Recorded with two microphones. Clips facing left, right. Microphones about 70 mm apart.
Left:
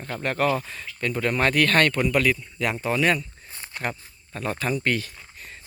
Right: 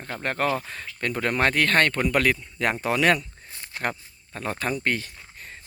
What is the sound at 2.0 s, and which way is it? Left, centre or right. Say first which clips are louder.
Speech: even; right.